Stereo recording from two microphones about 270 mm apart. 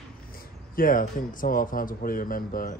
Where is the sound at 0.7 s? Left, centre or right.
Left.